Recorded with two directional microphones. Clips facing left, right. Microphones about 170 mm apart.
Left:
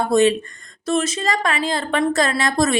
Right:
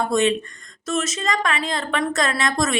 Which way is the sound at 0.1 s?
35° left (ahead or behind).